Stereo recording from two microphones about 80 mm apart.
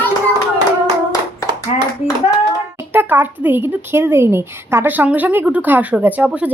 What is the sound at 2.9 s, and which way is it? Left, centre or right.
A woman's voice, right.